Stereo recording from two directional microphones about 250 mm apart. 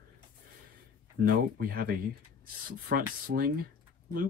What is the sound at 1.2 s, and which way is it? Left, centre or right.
Speech, right.